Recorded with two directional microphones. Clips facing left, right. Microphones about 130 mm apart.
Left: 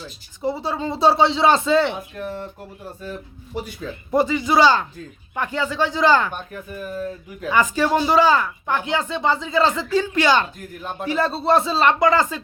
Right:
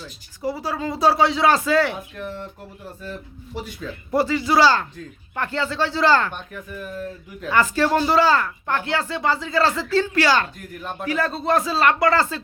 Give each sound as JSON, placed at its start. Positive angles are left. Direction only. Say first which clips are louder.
{"t": 0.4, "sound": "speech", "louder": "left 2 dB", "side_deg": 25}
{"t": 2.1, "sound": "speech", "louder": "left 2 dB", "side_deg": 40}
{"t": 4.1, "sound": "speech", "louder": "left 1 dB", "side_deg": 20}
{"t": 6.3, "sound": "speech", "louder": "left 2 dB", "side_deg": 40}
{"t": 7.4, "sound": "speech", "louder": "even", "side_deg": 15}